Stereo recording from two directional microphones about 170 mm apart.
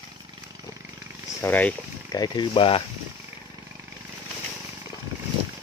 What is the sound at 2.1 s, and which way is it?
Speech, 25° left (ahead or behind).